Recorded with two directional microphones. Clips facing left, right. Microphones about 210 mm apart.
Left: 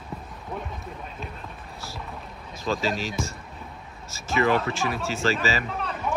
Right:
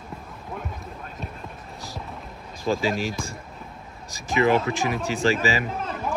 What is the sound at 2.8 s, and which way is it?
Speech, 15° right (ahead or behind).